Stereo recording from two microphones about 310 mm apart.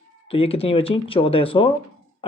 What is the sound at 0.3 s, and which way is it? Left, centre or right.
Speech, centre.